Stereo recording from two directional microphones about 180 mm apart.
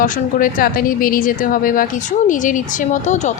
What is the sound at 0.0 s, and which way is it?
Speech, 50° left (ahead or behind).